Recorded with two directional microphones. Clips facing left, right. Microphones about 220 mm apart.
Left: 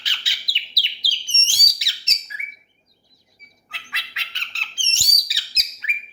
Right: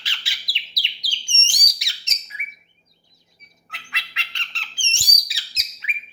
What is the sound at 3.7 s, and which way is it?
Squawk, centre (ahead or behind).